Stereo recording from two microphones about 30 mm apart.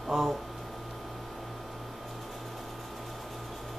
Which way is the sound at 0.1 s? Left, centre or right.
Centre.